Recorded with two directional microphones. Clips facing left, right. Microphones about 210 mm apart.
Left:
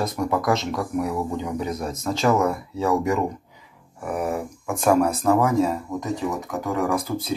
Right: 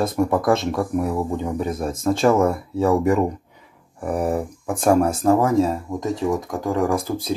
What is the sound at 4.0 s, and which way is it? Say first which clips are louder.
Speech: right 4 dB; 35° right (ahead or behind).